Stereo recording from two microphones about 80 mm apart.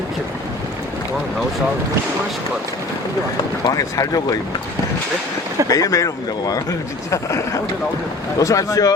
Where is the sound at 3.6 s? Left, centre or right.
Left.